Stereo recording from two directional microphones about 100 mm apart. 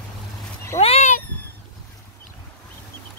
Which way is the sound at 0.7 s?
90° left.